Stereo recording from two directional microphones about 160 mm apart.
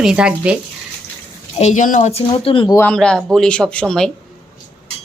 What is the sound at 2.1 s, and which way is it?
Speech, 40° left (ahead or behind).